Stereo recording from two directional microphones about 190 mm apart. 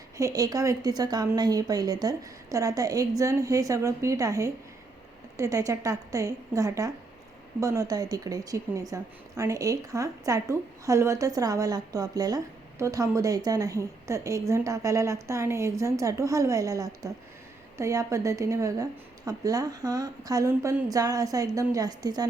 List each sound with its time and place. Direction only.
0.2 s a woman's voice: 15° right (ahead or behind)